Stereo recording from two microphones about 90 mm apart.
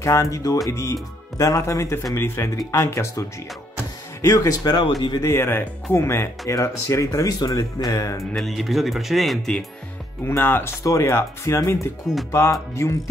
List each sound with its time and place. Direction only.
0.0 s speech: 35° left (ahead or behind)
5.2 s speech: 30° left (ahead or behind)
8.4 s speech: centre (ahead or behind)
10.2 s speech: 25° left (ahead or behind)